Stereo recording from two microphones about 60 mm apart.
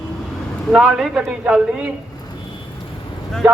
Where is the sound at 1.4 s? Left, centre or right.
Centre.